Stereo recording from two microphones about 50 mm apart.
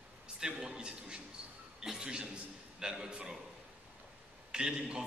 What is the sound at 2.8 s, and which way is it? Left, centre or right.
Speech, centre.